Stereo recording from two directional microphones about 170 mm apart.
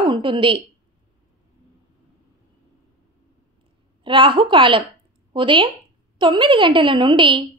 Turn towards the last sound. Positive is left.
turn(degrees=-30)  # may be behind; listen again after turning